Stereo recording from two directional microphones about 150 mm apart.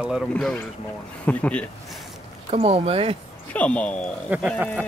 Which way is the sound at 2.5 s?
45° right (ahead or behind).